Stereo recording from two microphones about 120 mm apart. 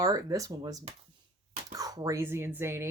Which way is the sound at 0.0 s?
30° right (ahead or behind).